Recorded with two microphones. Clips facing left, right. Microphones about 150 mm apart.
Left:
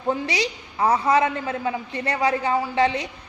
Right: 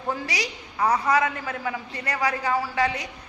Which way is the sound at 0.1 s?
25° left (ahead or behind).